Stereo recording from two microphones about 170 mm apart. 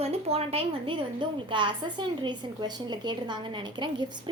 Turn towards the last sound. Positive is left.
turn(degrees=-25)  # may be behind; listen again after turning